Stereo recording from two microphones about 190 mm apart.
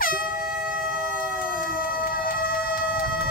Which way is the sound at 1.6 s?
50° left (ahead or behind).